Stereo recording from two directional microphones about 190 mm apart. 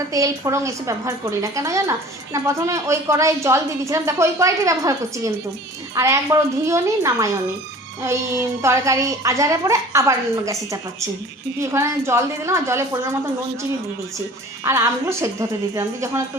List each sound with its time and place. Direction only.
0.1 s a woman's voice: 15° right (ahead or behind)
14.6 s a woman's voice: 15° right (ahead or behind)